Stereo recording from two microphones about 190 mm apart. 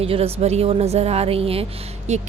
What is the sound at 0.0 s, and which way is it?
A woman's voice, 30° right (ahead or behind).